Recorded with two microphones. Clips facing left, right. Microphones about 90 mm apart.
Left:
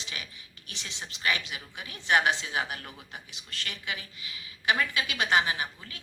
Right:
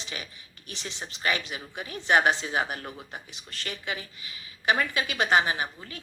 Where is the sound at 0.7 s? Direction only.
35° right (ahead or behind).